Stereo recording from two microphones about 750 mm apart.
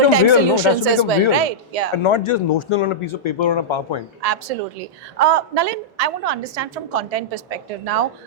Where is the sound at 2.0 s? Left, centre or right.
Left.